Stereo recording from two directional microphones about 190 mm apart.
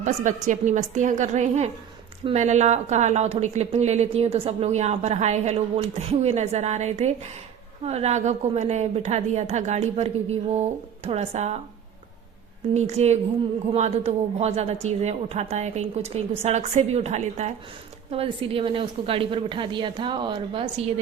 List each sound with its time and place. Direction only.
0.0 s a woman's voice: 40° right (ahead or behind)
12.7 s a woman's voice: 35° right (ahead or behind)